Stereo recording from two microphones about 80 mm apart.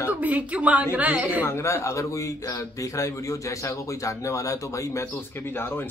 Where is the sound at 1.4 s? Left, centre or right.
Left.